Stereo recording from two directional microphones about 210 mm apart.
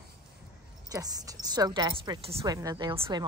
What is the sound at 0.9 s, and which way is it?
A woman's voice, 20° right (ahead or behind).